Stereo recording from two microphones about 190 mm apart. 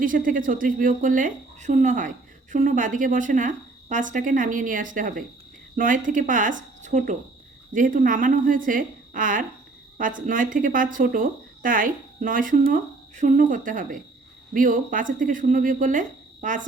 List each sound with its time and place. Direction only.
0.0 s speech: 45° right (ahead or behind)